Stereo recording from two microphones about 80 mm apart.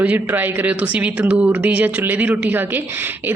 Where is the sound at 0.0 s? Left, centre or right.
Right.